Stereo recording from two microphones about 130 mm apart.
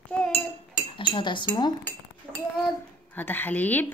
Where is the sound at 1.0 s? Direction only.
40° left (ahead or behind).